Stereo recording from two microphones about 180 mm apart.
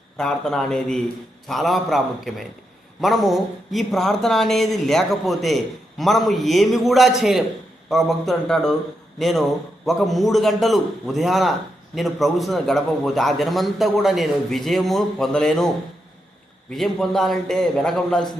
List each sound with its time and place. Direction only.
0.2 s a man's voice: centre (ahead or behind)